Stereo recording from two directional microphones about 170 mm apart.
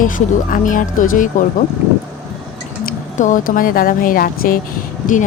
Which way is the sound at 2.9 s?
50° left (ahead or behind).